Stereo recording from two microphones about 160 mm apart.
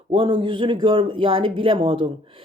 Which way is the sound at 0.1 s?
30° right (ahead or behind).